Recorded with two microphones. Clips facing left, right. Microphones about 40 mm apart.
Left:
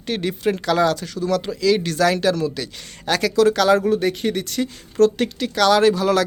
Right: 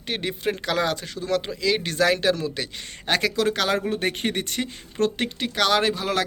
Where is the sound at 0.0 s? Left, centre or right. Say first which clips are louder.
Left 5 dB; centre.